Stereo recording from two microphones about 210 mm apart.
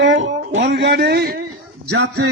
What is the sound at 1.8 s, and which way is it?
Speech, 60° right (ahead or behind).